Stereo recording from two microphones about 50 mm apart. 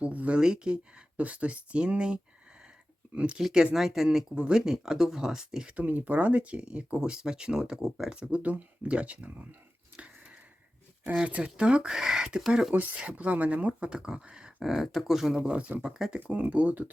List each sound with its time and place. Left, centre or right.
0.0 s speech: right
1.2 s speech: right
3.3 s speech: centre
4.4 s speech: right
4.6 s speech: centre
5.7 s speech: right; by 8.2 s centre
8.2 s speech: right
11.3 s speech: right
12.7 s speech: right; by 15.4 s centre
15.4 s speech: right
16.3 s speech: right